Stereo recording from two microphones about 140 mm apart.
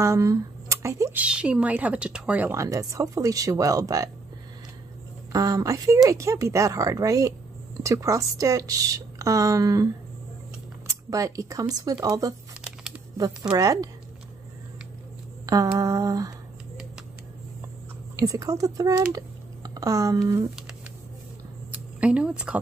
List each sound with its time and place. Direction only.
0.0 s speech: 20° right (ahead or behind)
1.2 s speech: 10° right (ahead or behind); by 4.1 s 25° right (ahead or behind)
5.3 s speech: 25° right (ahead or behind)
10.9 s speech: 25° right (ahead or behind)
15.4 s speech: 25° right (ahead or behind)
18.1 s speech: 25° right (ahead or behind)
21.7 s speech: 10° right (ahead or behind)